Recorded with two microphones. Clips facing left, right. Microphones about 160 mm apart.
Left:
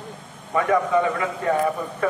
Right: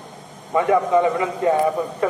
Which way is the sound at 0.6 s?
25° right (ahead or behind).